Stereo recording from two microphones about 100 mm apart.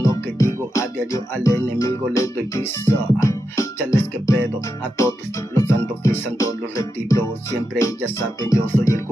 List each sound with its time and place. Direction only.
0.0 s music: 30° left (ahead or behind)